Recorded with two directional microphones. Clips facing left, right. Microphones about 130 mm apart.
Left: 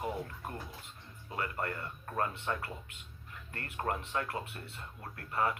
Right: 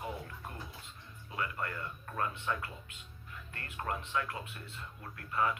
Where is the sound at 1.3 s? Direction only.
40° left (ahead or behind).